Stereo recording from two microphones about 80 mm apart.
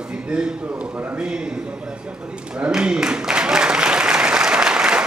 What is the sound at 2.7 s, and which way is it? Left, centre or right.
Applause, centre.